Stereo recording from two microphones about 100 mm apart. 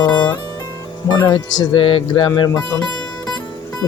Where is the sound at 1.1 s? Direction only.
50° left (ahead or behind).